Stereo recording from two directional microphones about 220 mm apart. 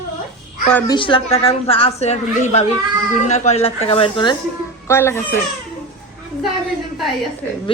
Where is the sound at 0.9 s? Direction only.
20° left (ahead or behind).